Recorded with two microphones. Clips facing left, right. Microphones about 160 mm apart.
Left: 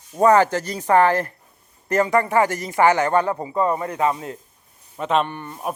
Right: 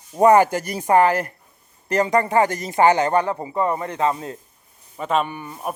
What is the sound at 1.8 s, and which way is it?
A man's voice, 25° right (ahead or behind).